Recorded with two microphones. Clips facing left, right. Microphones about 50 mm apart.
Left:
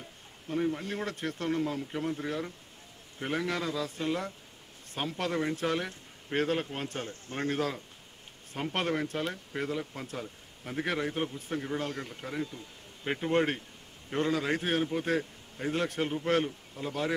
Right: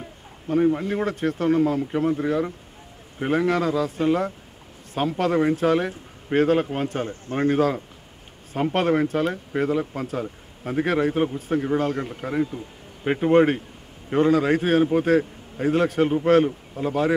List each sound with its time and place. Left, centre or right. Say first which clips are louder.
0.0 s a man's voice: right 9 dB; right
13.0 s a man's voice: right 11 dB; centre